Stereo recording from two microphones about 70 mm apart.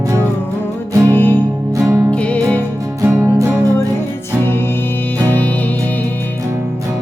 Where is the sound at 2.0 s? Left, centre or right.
Centre.